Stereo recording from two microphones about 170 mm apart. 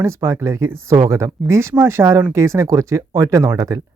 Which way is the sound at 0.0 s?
15° right (ahead or behind).